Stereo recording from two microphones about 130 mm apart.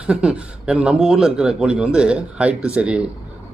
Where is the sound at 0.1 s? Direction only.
10° right (ahead or behind).